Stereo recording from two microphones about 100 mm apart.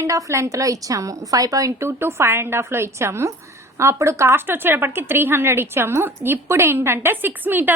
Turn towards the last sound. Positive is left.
turn(degrees=-20)  # may be behind; listen again after turning